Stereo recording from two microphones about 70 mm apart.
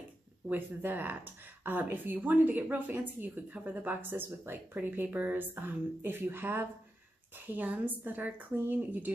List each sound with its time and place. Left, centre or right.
0.5 s speech: right